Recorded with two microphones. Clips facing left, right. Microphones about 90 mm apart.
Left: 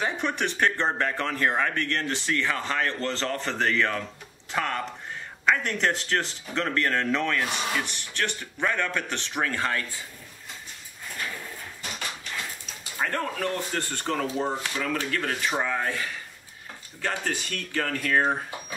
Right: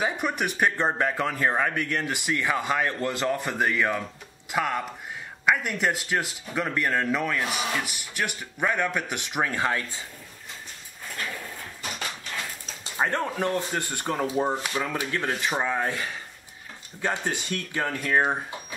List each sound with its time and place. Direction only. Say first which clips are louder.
0.0 s speech: right 1 dB; 10° right (ahead or behind)
12.9 s speech: right 2 dB; 25° right (ahead or behind)